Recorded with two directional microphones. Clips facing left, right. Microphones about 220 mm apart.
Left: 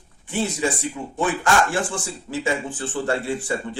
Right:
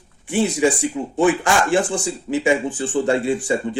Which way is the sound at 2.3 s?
15° right (ahead or behind).